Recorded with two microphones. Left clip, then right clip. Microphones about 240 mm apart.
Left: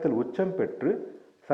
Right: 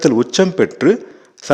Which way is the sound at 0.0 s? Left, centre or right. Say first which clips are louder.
Right 13 dB; right.